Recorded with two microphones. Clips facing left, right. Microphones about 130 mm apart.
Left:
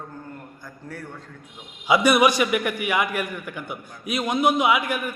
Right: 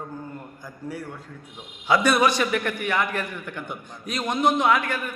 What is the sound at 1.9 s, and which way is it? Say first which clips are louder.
A man's voice: left 2 dB; 10° left (ahead or behind).